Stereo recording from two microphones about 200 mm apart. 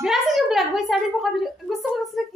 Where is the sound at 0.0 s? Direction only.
Centre (ahead or behind).